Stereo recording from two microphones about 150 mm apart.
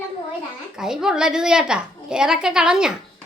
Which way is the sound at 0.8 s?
5° right (ahead or behind).